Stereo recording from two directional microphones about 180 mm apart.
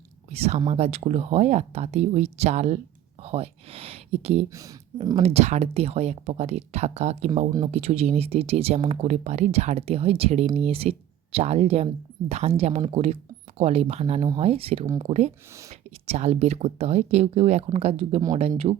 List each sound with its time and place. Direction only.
0.3 s speech: 35° right (ahead or behind)